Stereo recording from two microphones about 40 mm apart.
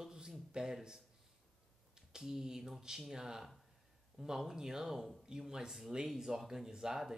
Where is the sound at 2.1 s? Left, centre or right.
Centre.